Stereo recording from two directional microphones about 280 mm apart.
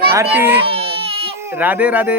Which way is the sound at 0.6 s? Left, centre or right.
Centre.